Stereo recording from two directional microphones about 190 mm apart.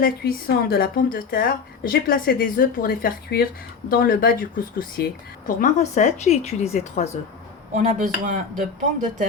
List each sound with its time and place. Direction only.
0.0 s a woman's voice: 55° left (ahead or behind); by 7.1 s 35° left (ahead or behind)
7.7 s speech: 40° right (ahead or behind)